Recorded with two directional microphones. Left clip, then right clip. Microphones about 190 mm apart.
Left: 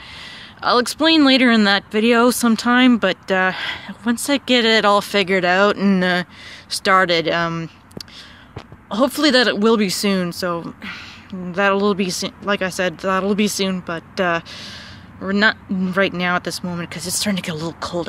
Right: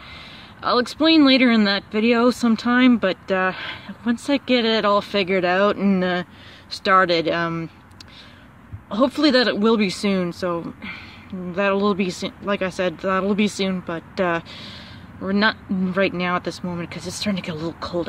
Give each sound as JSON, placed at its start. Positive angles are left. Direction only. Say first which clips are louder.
{"t": 0.6, "sound": "speech", "louder": "left 3 dB", "side_deg": 10}
{"t": 8.9, "sound": "speech", "louder": "left 2 dB", "side_deg": 5}